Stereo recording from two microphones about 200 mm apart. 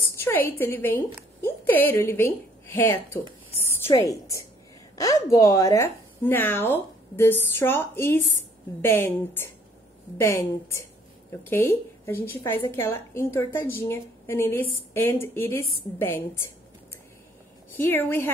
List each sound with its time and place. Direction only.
0.2 s a woman's voice: 10° left (ahead or behind)
17.7 s a woman's voice: 10° left (ahead or behind)